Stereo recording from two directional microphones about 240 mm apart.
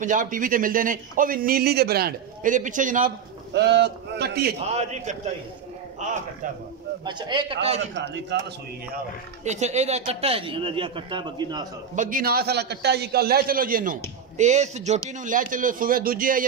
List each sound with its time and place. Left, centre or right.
0.0 s a man's voice: right
3.5 s a man's voice: right
4.6 s a man's voice: right
7.1 s speech: centre
7.9 s a man's voice: right
8.9 s speech: right
11.9 s a man's voice: right